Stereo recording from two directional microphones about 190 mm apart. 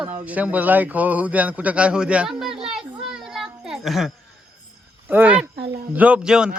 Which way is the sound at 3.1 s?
5° right (ahead or behind).